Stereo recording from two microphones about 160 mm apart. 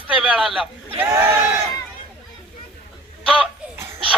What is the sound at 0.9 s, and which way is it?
Speech, 15° right (ahead or behind).